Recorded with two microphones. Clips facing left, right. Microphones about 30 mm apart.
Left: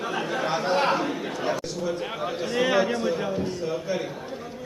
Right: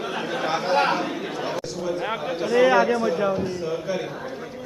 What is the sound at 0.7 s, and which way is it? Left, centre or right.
Chatter, centre.